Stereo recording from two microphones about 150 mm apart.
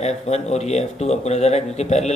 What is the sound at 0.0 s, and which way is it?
Speech, 45° left (ahead or behind).